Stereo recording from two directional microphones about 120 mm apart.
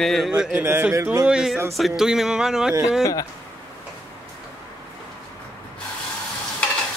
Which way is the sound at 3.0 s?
30° left (ahead or behind).